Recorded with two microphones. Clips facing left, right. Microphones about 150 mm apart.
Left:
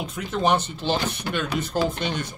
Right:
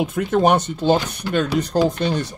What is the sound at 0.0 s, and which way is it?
Speech, 50° right (ahead or behind).